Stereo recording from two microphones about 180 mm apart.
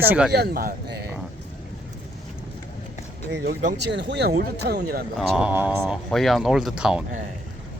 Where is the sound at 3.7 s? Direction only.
75° right (ahead or behind).